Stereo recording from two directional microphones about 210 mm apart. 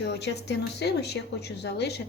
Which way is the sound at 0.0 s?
50° left (ahead or behind).